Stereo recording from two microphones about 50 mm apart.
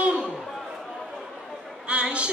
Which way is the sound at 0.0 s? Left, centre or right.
Centre.